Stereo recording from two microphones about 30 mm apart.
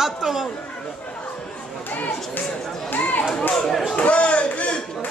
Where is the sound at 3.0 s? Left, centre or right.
Left.